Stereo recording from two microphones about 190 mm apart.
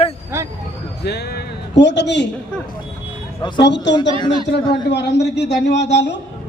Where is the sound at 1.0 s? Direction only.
60° left (ahead or behind).